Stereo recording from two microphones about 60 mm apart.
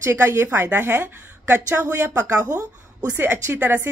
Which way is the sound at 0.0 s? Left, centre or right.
Right.